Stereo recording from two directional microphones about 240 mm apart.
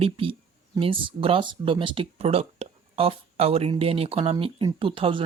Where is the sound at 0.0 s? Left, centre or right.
Right.